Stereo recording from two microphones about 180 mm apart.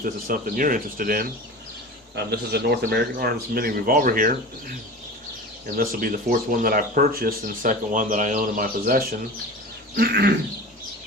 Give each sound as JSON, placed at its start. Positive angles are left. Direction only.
{"t": 0.0, "sound": "speech", "side_deg": -50}
{"t": 2.1, "sound": "a man's voice", "side_deg": -65}
{"t": 5.7, "sound": "a man's voice", "side_deg": -55}